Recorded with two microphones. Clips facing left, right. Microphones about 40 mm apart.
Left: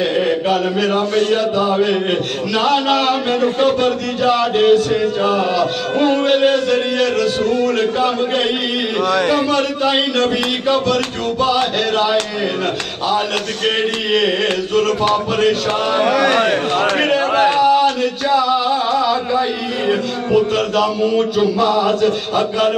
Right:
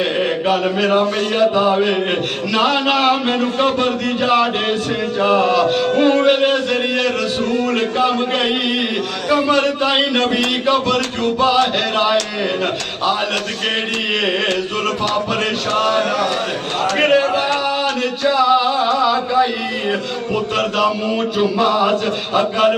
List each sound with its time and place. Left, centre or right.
0.5 s speech: centre
9.5 s speech: centre
16.2 s speech: left
17.0 s speech: centre
17.6 s a sound: centre
18.3 s speech: centre